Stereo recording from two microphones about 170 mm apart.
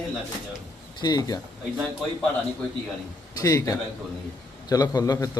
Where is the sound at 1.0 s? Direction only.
25° left (ahead or behind).